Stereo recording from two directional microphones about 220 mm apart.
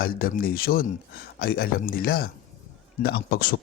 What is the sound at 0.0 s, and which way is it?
Speech, 40° left (ahead or behind).